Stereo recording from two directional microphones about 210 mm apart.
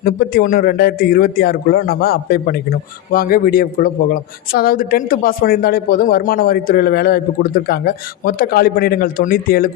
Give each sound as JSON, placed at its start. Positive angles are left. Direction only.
{"t": 0.0, "sound": "a man's voice", "side_deg": 45}